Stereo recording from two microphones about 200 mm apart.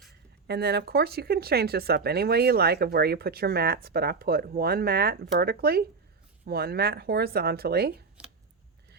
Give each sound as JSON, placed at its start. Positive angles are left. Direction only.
{"t": 0.4, "sound": "speech", "side_deg": -55}